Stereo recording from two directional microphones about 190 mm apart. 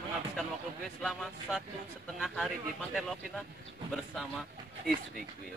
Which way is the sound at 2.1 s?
Centre (ahead or behind).